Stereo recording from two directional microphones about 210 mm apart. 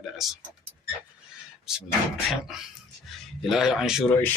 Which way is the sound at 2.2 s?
Centre (ahead or behind).